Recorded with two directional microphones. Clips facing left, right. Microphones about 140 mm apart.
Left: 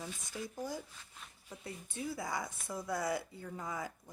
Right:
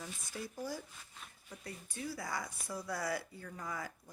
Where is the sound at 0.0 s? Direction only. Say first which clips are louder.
Left 2 dB; 15° left (ahead or behind).